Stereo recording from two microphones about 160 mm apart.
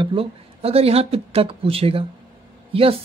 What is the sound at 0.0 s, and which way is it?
Speech, 35° right (ahead or behind).